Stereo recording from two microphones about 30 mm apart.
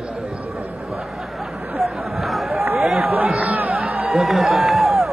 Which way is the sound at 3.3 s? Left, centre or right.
Right.